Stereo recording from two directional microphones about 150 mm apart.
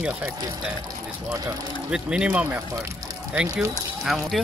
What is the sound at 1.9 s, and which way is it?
Speech, 5° right (ahead or behind).